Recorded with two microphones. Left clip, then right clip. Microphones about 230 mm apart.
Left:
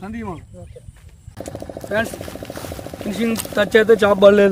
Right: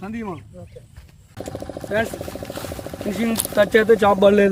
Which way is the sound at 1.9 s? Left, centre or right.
Centre.